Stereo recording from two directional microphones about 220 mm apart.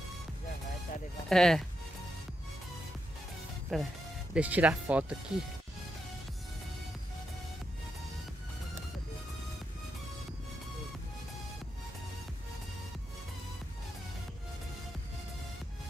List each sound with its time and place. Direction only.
1.3 s speech: centre (ahead or behind)
3.7 s speech: centre (ahead or behind)